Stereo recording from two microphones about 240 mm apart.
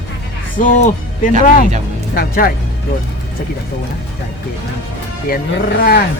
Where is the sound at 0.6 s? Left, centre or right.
Left.